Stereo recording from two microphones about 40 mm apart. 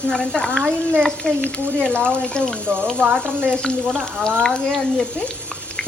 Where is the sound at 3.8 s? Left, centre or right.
Right.